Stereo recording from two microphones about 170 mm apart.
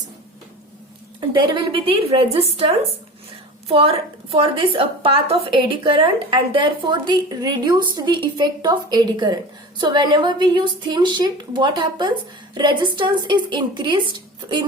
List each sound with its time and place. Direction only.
1.3 s a woman's voice: 30° right (ahead or behind)